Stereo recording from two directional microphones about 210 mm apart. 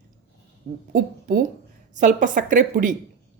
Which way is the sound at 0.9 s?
40° right (ahead or behind).